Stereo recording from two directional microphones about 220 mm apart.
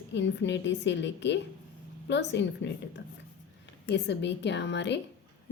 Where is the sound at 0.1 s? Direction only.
55° left (ahead or behind).